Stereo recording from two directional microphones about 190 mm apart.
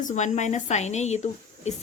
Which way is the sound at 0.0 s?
40° left (ahead or behind).